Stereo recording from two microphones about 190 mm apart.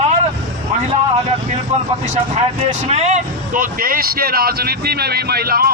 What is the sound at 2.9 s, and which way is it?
Speech, 35° right (ahead or behind).